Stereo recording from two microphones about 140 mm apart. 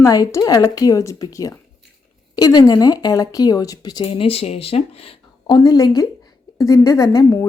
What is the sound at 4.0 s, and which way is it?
Speech, 40° left (ahead or behind).